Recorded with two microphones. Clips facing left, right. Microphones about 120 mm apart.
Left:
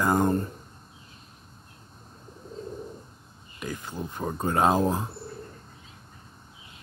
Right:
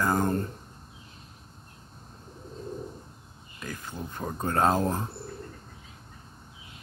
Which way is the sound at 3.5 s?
15° left (ahead or behind).